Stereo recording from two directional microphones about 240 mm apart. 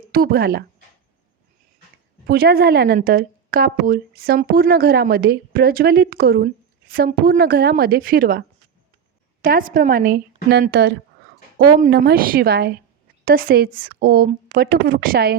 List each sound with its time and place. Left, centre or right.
0.1 s speech: right
2.2 s speech: right